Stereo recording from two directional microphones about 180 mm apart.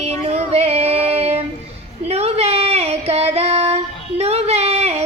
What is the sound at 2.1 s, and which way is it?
Female singing, 35° right (ahead or behind).